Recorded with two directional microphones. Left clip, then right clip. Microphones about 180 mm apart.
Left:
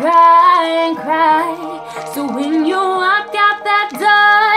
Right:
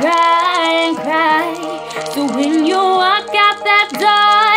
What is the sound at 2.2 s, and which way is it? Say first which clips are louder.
Music: right 1 dB; 20° right (ahead or behind).